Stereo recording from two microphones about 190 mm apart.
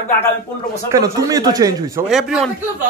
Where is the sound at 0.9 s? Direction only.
20° right (ahead or behind).